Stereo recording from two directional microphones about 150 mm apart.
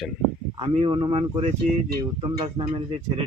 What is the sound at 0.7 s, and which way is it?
Speech, 35° right (ahead or behind).